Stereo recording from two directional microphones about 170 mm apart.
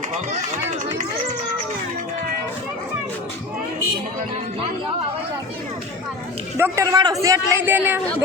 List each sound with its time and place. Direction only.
0.1 s run: 45° right (ahead or behind)
6.6 s a man's voice: 20° right (ahead or behind)